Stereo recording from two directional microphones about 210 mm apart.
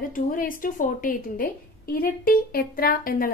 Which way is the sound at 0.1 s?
40° left (ahead or behind).